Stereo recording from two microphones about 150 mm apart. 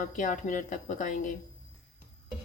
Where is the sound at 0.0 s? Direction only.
60° left (ahead or behind).